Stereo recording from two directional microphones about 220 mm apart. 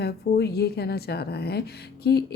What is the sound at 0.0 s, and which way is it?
A woman's voice, 45° left (ahead or behind).